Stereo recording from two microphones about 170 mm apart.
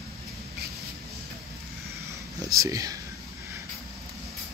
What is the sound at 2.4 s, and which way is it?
Speech, 20° right (ahead or behind).